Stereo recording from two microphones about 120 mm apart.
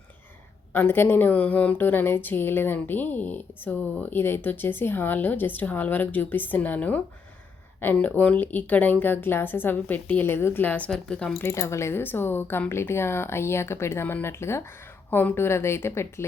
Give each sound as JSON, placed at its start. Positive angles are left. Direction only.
{"t": 0.7, "sound": "a woman's voice", "side_deg": 15}
{"t": 11.4, "sound": "speech", "side_deg": 25}